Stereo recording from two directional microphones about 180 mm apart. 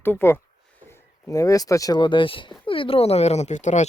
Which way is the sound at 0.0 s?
10° left (ahead or behind).